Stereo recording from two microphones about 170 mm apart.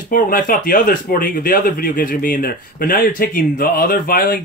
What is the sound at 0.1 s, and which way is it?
Speech, 55° left (ahead or behind).